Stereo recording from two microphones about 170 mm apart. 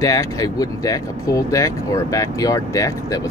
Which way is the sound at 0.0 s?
20° left (ahead or behind).